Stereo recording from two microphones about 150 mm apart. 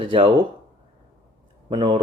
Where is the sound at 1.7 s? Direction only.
30° right (ahead or behind).